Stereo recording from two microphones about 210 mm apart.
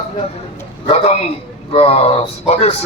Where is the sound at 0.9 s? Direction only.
30° left (ahead or behind).